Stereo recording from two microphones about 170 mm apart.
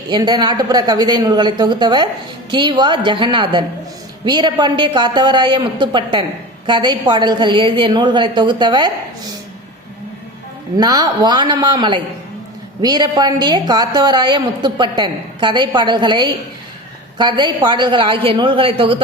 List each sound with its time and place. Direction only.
0.1 s a woman's voice: 25° right (ahead or behind)
10.8 s a woman's voice: 25° right (ahead or behind)